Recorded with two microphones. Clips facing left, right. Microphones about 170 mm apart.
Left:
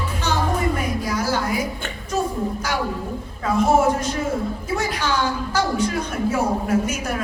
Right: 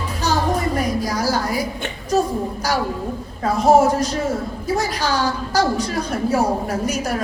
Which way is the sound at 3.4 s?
35° right (ahead or behind).